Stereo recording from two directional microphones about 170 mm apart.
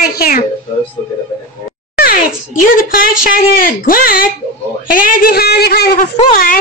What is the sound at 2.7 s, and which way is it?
A woman's voice, 55° left (ahead or behind).